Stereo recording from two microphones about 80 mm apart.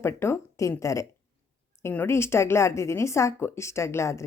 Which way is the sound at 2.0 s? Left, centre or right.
Left.